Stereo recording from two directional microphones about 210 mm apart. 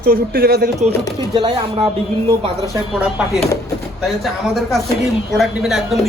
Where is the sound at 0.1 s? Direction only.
45° right (ahead or behind).